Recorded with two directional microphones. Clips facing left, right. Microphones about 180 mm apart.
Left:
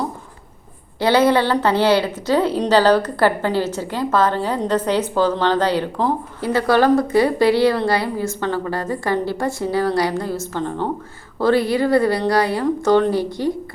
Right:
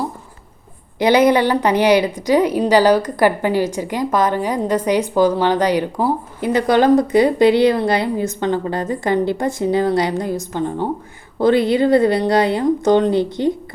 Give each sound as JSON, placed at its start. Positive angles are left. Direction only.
{"t": 0.9, "sound": "a woman's voice", "side_deg": -15}